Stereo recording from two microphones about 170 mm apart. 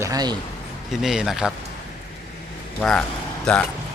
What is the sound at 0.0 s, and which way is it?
Speech, 20° right (ahead or behind).